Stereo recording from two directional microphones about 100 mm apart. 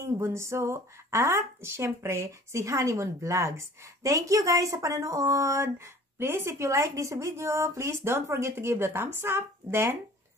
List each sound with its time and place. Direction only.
0.0 s speech: 30° right (ahead or behind)